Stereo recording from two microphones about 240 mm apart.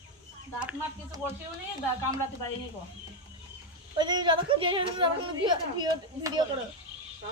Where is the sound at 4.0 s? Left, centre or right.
Centre.